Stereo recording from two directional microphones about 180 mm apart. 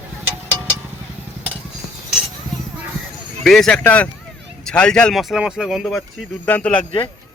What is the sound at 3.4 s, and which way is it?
Speech, centre (ahead or behind).